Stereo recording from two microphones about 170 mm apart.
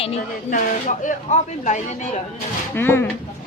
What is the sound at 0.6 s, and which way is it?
Speech, 50° left (ahead or behind).